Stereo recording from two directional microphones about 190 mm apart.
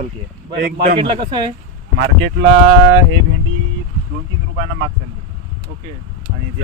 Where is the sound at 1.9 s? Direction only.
60° right (ahead or behind).